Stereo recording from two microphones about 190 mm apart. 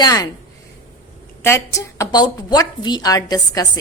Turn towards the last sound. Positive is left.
turn(degrees=20)  # may be behind; listen again after turning